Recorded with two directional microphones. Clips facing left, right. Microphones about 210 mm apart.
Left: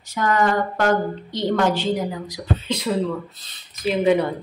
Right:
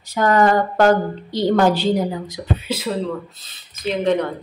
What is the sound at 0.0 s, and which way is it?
A woman's voice, 35° right (ahead or behind).